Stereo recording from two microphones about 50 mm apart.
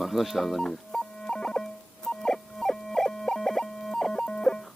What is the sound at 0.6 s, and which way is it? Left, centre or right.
Music, centre.